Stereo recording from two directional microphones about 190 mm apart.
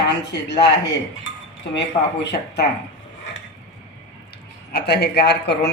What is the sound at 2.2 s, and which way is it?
Speech, 60° left (ahead or behind).